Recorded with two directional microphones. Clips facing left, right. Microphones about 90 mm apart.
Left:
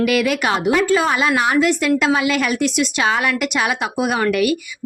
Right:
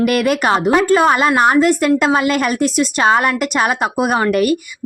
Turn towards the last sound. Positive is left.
turn(degrees=-40)  # may be behind; listen again after turning